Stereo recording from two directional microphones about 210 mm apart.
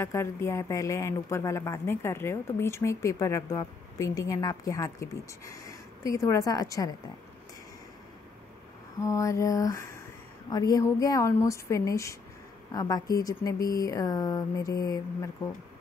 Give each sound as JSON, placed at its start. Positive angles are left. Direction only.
{"t": 0.0, "sound": "a woman's voice", "side_deg": 10}
{"t": 9.0, "sound": "speech", "side_deg": 15}